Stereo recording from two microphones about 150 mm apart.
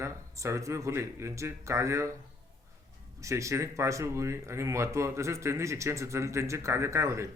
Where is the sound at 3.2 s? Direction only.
20° right (ahead or behind).